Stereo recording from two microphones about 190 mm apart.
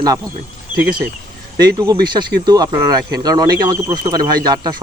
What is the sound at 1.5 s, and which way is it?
Speech, 20° right (ahead or behind).